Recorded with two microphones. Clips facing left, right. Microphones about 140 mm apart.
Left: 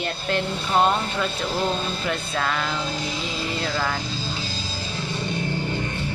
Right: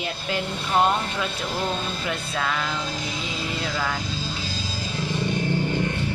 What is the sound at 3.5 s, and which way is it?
Speech, centre (ahead or behind).